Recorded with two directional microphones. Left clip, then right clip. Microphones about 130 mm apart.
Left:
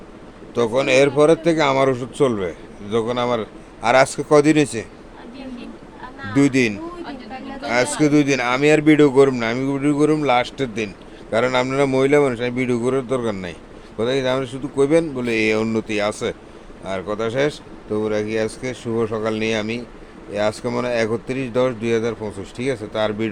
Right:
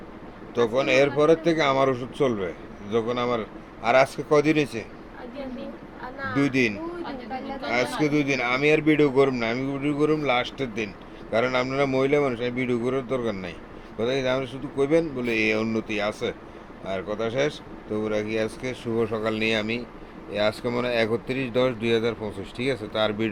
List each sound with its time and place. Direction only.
0.5 s speech: 45° left (ahead or behind)
6.3 s speech: 50° left (ahead or behind); by 23.3 s 15° left (ahead or behind)